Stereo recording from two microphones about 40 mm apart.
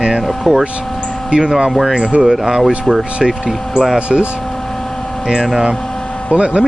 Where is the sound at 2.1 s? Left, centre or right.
Right.